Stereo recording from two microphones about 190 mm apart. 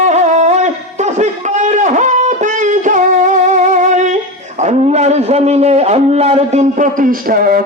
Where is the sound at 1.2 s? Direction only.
40° right (ahead or behind).